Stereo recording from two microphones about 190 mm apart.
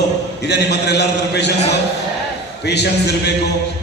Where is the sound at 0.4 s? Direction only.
60° left (ahead or behind).